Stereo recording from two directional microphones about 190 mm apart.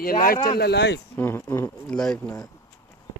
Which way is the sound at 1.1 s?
10° left (ahead or behind).